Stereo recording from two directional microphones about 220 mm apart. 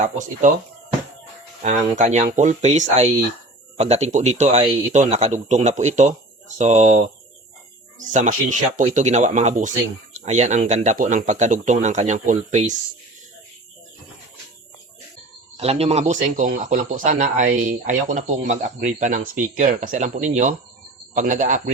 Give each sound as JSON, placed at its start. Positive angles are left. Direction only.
{"t": 0.0, "sound": "speech", "side_deg": -35}
{"t": 1.6, "sound": "speech", "side_deg": -35}
{"t": 8.1, "sound": "speech", "side_deg": -35}
{"t": 15.5, "sound": "speech", "side_deg": -30}